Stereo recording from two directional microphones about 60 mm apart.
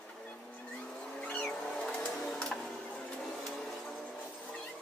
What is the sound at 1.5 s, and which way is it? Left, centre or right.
Vehicle, centre.